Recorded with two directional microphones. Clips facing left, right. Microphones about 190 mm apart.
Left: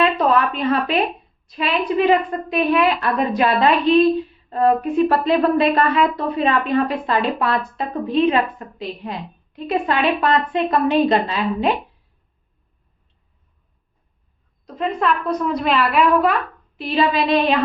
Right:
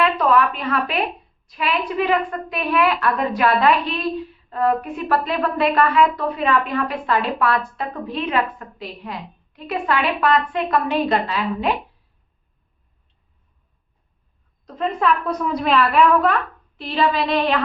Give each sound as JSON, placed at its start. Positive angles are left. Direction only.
{"t": 0.0, "sound": "speech", "side_deg": 25}
{"t": 14.8, "sound": "a woman's voice", "side_deg": 0}
{"t": 16.7, "sound": "female singing", "side_deg": 15}